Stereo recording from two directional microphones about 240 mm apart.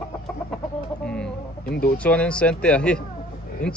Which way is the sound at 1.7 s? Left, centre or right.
Left.